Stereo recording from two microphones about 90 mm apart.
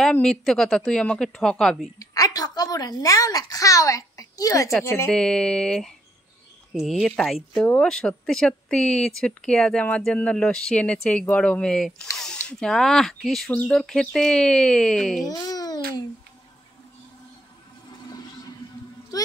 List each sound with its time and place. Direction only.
0.1 s speech: 5° left (ahead or behind)
2.0 s a woman's voice: 40° left (ahead or behind)
5.1 s speech: 10° left (ahead or behind)
15.2 s a child's voice: 45° left (ahead or behind)
19.1 s a woman's voice: 45° left (ahead or behind)